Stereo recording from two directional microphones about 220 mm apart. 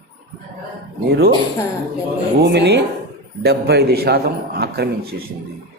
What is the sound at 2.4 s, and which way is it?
A man's voice, 50° right (ahead or behind).